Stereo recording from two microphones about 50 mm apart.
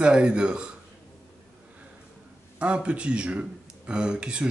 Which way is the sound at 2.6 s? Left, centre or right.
Right.